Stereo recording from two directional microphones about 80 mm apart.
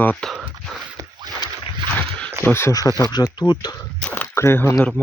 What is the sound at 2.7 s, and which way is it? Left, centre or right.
Speech, left.